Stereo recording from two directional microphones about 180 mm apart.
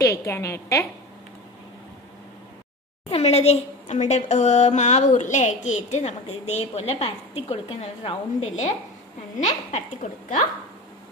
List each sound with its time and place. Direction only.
0.0 s a woman's voice: 15° left (ahead or behind)
3.1 s a woman's voice: 35° left (ahead or behind)